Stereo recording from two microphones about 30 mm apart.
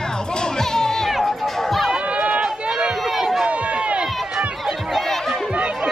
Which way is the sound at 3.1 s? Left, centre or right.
Centre.